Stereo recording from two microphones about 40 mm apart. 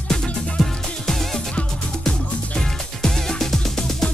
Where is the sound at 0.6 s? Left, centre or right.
Centre.